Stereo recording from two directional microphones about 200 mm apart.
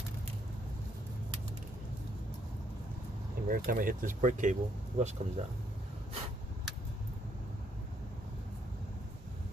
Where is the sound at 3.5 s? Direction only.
45° right (ahead or behind).